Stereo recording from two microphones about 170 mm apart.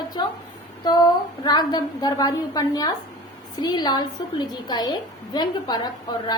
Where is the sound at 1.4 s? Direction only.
25° left (ahead or behind).